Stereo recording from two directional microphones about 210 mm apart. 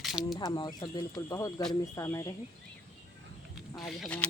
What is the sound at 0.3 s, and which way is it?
Speech, 20° left (ahead or behind).